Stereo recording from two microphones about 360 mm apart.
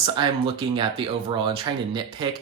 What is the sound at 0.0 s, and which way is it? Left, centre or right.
Speech, centre.